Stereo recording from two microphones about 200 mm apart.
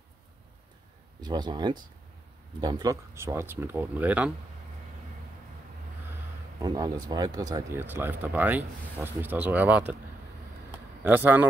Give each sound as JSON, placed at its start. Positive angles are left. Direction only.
{"t": 1.2, "sound": "speech", "side_deg": -20}
{"t": 6.6, "sound": "speech", "side_deg": -20}
{"t": 11.1, "sound": "speech", "side_deg": -10}